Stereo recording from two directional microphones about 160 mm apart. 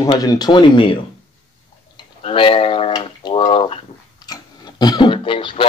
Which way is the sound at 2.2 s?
35° left (ahead or behind).